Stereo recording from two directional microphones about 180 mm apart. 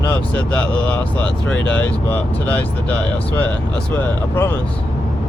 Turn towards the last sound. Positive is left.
turn(degrees=10)  # may be behind; listen again after turning